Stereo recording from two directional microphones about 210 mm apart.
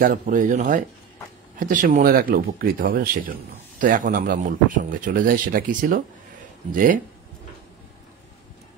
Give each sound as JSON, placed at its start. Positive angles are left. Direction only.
{"t": 0.0, "sound": "a man's voice", "side_deg": -40}